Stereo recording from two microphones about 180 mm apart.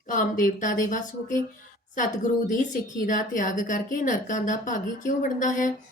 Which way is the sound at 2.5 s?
45° left (ahead or behind).